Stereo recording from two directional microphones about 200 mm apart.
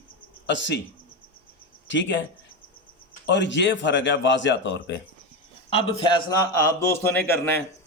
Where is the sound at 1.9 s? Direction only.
65° left (ahead or behind).